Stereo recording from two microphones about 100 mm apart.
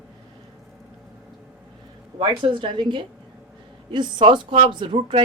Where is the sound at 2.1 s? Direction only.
55° right (ahead or behind).